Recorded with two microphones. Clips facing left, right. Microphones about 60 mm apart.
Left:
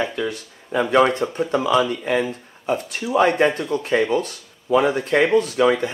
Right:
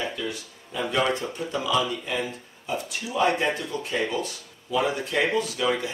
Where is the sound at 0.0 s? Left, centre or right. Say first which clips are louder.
Left 6 dB; left.